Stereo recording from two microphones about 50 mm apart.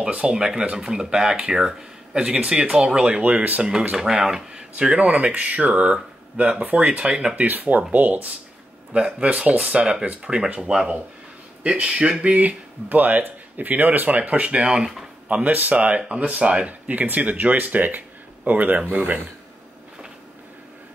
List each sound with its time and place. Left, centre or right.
0.0 s speech: right
3.1 s speech: right
3.9 s speech: centre; by 7.0 s right
7.0 s speech: centre
7.3 s speech: right
8.9 s speech: right
15.2 s speech: right